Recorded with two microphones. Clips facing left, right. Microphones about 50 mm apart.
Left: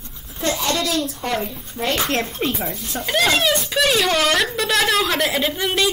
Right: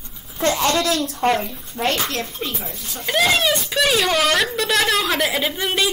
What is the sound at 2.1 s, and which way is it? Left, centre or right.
Speech, left.